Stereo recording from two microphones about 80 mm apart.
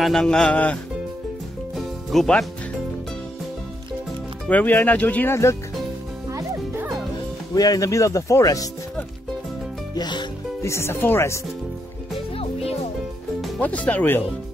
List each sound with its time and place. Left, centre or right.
0.0 s speech: centre
1.8 s music: centre
4.5 s speech: left
7.5 s speech: left
9.9 s music: left
10.6 s speech: left
13.6 s speech: centre